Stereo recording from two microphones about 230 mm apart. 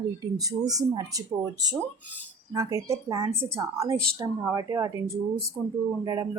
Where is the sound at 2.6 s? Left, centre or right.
Centre.